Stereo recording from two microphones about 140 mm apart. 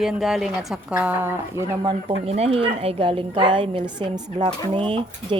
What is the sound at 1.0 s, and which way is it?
Speech, 15° right (ahead or behind).